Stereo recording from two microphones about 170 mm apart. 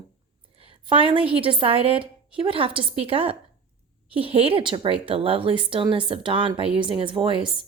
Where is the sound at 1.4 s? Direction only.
30° right (ahead or behind).